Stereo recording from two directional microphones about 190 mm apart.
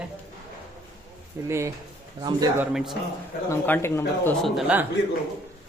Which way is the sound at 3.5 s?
10° left (ahead or behind).